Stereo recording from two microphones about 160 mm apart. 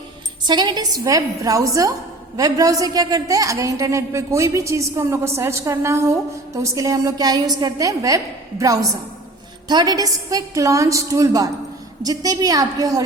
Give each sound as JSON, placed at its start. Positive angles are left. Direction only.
{"t": 0.4, "sound": "a woman's voice", "side_deg": -25}